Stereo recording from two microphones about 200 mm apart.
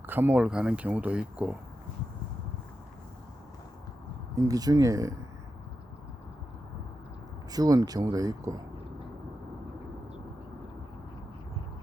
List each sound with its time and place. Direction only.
0.1 s speech: 10° right (ahead or behind)
4.4 s speech: 15° right (ahead or behind)
7.5 s speech: 20° right (ahead or behind)